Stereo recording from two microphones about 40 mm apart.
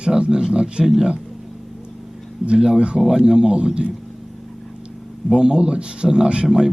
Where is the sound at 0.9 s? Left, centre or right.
Centre.